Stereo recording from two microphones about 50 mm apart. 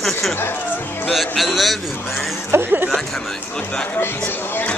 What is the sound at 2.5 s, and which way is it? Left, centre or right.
Speech, right.